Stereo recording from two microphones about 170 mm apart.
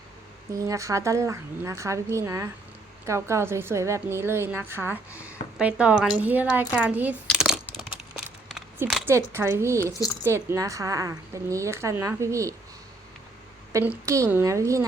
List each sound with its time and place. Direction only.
0.7 s a woman's voice: 20° right (ahead or behind)
7.3 s a sound: 5° right (ahead or behind)
9.0 s a woman's voice: 15° right (ahead or behind)
13.7 s a woman's voice: 15° right (ahead or behind)